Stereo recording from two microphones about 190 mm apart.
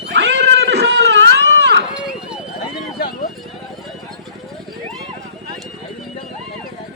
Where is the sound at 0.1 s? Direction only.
65° right (ahead or behind).